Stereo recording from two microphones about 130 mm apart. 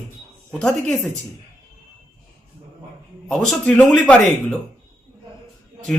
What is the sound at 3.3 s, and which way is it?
Speech, 5° left (ahead or behind).